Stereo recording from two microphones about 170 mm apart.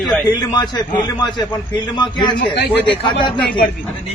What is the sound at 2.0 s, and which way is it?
A man's voice, 25° left (ahead or behind).